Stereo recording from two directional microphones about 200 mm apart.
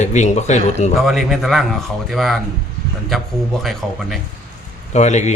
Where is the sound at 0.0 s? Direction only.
35° left (ahead or behind).